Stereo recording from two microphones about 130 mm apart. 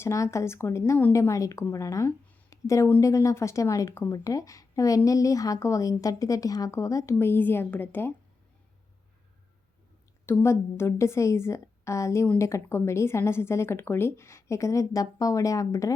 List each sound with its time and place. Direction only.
0.0 s a woman's voice: 20° left (ahead or behind)
10.2 s a woman's voice: 20° left (ahead or behind)